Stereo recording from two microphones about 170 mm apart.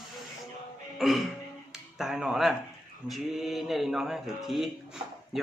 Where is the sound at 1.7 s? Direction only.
5° right (ahead or behind).